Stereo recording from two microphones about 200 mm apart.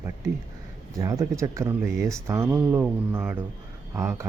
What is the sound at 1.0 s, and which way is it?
Speech, 15° right (ahead or behind).